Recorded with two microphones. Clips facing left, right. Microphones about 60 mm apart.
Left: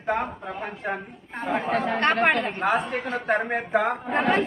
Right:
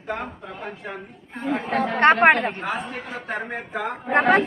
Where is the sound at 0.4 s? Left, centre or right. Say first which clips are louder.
Left 3 dB; left.